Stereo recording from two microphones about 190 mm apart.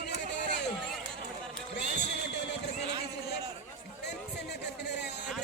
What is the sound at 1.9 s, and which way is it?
Music, 65° left (ahead or behind).